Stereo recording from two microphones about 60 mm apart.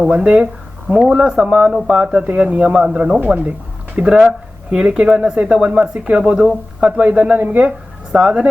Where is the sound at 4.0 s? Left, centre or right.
Centre.